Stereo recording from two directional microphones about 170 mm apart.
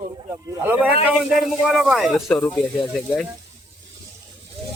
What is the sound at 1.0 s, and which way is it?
Speech, centre (ahead or behind).